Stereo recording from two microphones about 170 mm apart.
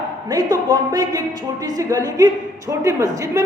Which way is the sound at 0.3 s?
20° right (ahead or behind).